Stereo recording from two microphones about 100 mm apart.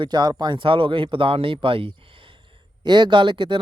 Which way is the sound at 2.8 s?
50° right (ahead or behind).